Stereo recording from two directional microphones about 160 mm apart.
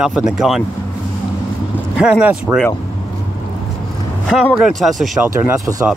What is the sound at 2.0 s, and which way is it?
Speech, 5° right (ahead or behind).